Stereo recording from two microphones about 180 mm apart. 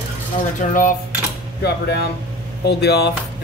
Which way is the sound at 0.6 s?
50° left (ahead or behind).